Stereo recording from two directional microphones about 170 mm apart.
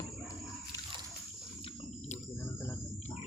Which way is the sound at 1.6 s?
40° left (ahead or behind).